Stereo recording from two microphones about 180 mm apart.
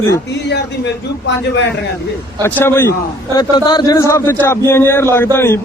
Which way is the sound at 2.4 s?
10° left (ahead or behind).